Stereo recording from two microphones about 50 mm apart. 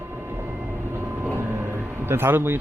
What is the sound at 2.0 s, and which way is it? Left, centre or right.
Speech, right.